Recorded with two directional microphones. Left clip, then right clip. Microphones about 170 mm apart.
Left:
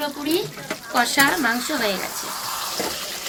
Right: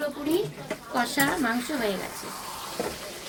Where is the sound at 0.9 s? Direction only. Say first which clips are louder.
Left 7 dB; 20° right (ahead or behind).